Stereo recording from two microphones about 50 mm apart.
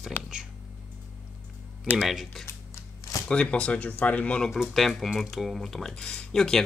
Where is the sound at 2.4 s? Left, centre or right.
Left.